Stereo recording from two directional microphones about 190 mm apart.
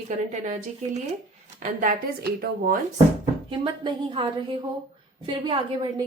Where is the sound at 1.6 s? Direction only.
50° right (ahead or behind).